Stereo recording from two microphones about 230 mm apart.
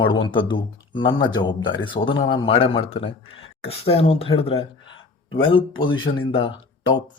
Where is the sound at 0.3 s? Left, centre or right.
Left.